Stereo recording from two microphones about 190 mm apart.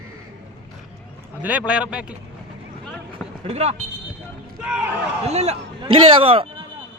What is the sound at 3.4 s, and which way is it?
Speech, 35° right (ahead or behind).